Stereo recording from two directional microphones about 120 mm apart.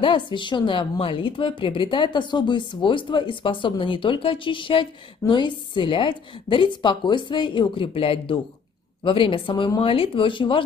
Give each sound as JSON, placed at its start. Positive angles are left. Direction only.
{"t": 0.0, "sound": "a woman's voice", "side_deg": 40}